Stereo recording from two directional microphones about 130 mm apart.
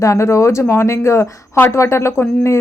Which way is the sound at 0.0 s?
20° left (ahead or behind).